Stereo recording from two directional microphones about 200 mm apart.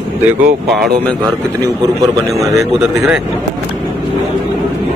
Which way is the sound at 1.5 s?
15° right (ahead or behind).